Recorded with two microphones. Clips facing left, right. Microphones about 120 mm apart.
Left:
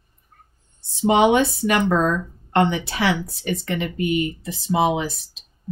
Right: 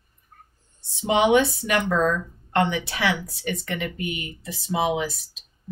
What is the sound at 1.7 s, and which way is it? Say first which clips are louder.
A woman's voice: left 1 dB; 30° left (ahead or behind).